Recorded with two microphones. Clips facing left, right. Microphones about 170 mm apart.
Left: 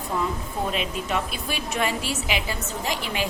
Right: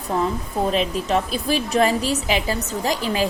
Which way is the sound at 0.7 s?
35° right (ahead or behind).